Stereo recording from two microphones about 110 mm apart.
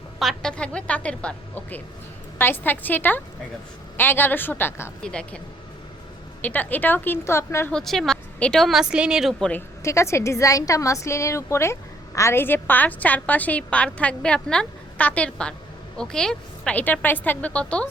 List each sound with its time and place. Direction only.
0.2 s a woman's voice: 5° left (ahead or behind)
6.4 s a woman's voice: 15° left (ahead or behind)
7.7 s a woman's voice: 5° left (ahead or behind)
9.4 s a woman's voice: 15° left (ahead or behind)
9.8 s a woman's voice: 25° left (ahead or behind); by 17.8 s 10° left (ahead or behind)